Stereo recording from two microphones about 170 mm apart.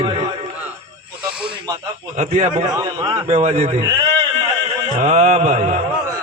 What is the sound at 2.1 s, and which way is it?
Speech, 45° right (ahead or behind).